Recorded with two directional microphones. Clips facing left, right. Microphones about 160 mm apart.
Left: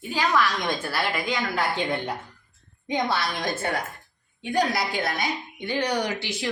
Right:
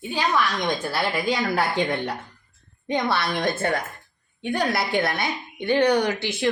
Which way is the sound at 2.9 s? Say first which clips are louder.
Right 2 dB; 60° right (ahead or behind).